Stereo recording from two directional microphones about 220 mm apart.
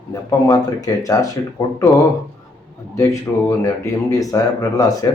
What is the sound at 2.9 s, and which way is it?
Speech, 15° left (ahead or behind).